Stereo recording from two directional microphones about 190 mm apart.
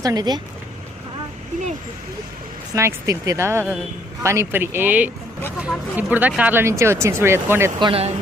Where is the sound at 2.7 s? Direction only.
15° right (ahead or behind).